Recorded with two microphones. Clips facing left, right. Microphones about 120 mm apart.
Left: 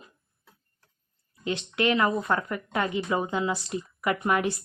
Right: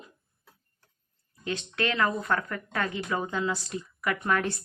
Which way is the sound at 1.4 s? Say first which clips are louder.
Left 4 dB; 20° left (ahead or behind).